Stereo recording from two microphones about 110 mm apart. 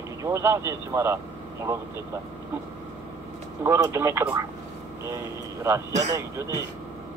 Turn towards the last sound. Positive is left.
turn(degrees=-30)  # may be behind; listen again after turning